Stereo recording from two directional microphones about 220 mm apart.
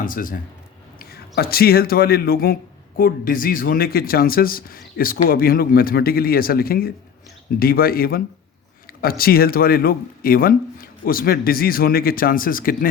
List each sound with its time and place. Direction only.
0.0 s speech: 40° left (ahead or behind)